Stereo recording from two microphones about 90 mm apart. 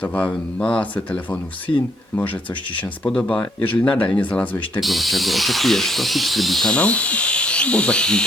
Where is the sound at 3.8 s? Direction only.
15° left (ahead or behind).